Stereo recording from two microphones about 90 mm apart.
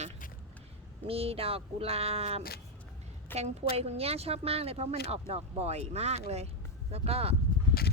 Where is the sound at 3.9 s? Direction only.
90° right.